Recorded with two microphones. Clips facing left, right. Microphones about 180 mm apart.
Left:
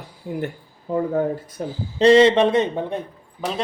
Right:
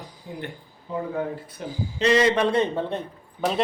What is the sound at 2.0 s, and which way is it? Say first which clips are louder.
Speech: left 7 dB; 30° left (ahead or behind).